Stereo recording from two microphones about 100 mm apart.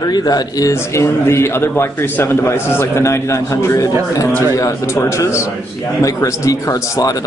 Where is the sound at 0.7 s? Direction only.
25° left (ahead or behind).